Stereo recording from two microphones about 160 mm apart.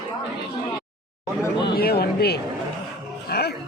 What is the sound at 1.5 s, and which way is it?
Speech, 80° left.